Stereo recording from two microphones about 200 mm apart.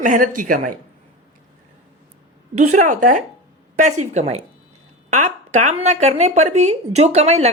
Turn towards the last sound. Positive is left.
turn(degrees=-30)  # may be behind; listen again after turning